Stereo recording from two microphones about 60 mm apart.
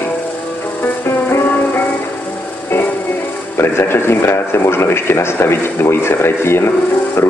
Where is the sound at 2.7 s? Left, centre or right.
Left.